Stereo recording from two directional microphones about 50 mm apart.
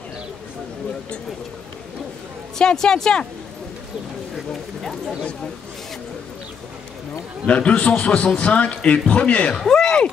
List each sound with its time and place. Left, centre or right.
2.6 s a woman's voice: centre
7.4 s a man's voice: left
9.7 s speech: centre